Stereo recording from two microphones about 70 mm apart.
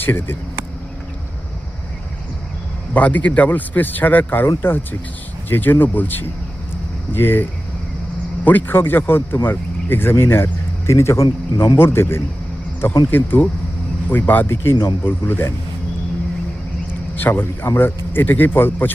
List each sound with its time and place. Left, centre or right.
0.0 s speech: left
2.9 s speech: left
8.4 s speech: left
17.2 s speech: left